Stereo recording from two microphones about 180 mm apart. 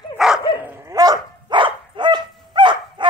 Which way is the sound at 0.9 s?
20° right (ahead or behind).